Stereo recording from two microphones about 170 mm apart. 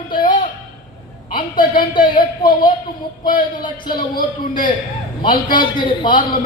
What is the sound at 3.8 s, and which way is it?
Speech, 60° left (ahead or behind).